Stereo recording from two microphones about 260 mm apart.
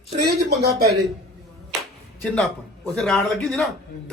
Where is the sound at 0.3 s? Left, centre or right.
Right.